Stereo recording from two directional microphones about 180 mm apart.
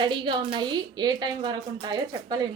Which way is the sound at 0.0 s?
25° right (ahead or behind).